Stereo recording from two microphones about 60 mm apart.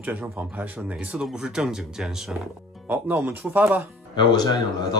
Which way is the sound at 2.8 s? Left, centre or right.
Right.